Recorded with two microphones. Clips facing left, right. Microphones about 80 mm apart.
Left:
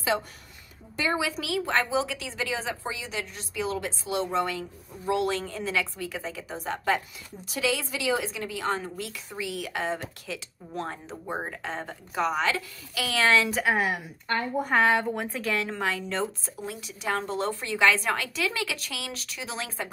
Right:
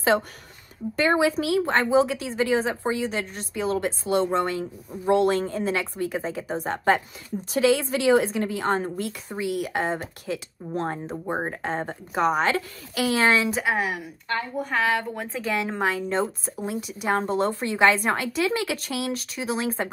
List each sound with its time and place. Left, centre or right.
0.9 s a woman's voice: right
1.2 s a woman's voice: right
13.5 s speech: centre
14.7 s a woman's voice: centre
15.3 s speech: centre
15.6 s a woman's voice: right